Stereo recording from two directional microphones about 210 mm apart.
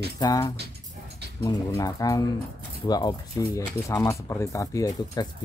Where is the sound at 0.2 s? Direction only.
15° left (ahead or behind).